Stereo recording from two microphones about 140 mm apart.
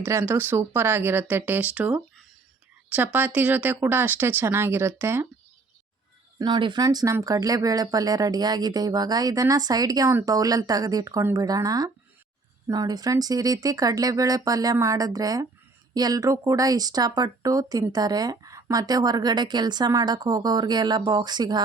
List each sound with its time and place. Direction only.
0.0 s speech: 15° right (ahead or behind)
6.4 s speech: 30° right (ahead or behind)